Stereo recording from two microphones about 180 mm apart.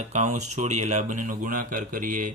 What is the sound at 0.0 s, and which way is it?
Speech, 40° right (ahead or behind).